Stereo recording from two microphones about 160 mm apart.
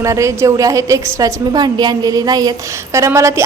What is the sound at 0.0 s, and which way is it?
A woman's voice, 20° right (ahead or behind).